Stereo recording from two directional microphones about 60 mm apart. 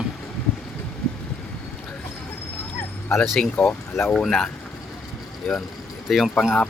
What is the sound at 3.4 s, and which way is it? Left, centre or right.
Speech, centre.